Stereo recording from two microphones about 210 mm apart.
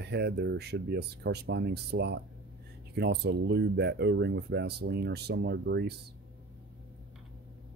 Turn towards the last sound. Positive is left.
turn(degrees=-55)  # may be behind; listen again after turning